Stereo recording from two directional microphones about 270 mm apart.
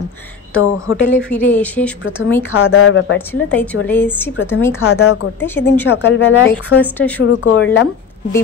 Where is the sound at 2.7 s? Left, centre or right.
Left.